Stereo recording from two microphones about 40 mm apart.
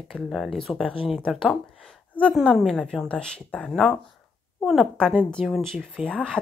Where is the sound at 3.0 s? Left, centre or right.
Left.